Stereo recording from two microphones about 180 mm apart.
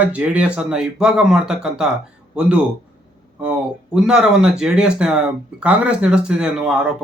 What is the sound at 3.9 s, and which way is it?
Speech, 5° right (ahead or behind).